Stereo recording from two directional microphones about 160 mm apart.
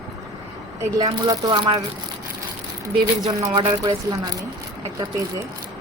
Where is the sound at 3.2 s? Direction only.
25° right (ahead or behind).